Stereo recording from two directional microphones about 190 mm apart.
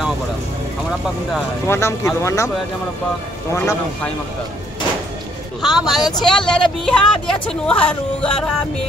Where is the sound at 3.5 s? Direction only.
15° left (ahead or behind).